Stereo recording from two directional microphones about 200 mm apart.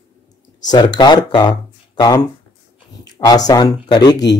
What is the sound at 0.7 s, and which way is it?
Speech, 20° left (ahead or behind).